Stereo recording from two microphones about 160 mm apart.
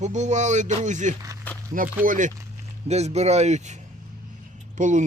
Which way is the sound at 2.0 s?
55° right (ahead or behind).